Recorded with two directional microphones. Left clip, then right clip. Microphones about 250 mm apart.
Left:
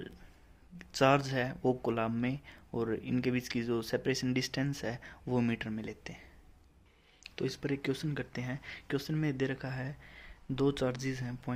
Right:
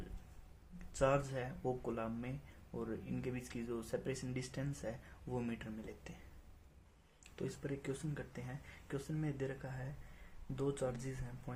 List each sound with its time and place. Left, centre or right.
0.8 s speech: left
7.3 s speech: left